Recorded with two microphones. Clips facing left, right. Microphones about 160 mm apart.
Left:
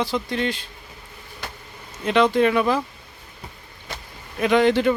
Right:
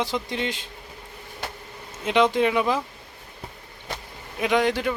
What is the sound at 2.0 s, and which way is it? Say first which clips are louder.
Speech: left 2 dB; 15° right (ahead or behind).